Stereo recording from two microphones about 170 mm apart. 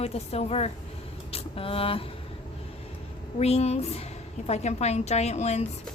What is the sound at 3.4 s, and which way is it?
Speech, 40° left (ahead or behind).